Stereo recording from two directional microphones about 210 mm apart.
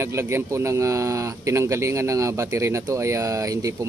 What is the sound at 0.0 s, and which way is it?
Speech, 10° right (ahead or behind).